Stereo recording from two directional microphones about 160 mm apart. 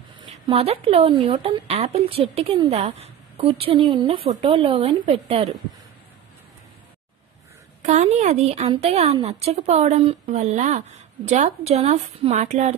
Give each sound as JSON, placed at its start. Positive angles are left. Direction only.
{"t": 0.5, "sound": "a woman's voice", "side_deg": -35}
{"t": 7.8, "sound": "a woman's voice", "side_deg": -45}